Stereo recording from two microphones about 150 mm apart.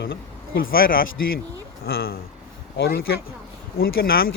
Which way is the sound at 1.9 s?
90° left.